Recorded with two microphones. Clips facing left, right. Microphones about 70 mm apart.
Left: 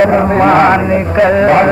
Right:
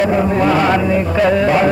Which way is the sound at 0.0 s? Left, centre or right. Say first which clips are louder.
Left 5 dB; left.